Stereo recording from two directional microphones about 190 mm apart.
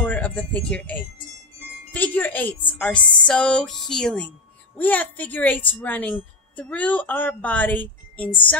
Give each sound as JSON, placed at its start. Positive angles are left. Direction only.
{"t": 0.0, "sound": "a woman's voice", "side_deg": 10}